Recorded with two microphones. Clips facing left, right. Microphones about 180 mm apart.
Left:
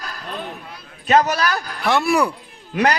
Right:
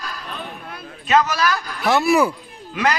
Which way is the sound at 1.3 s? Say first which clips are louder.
Right 1 dB; 35° left (ahead or behind).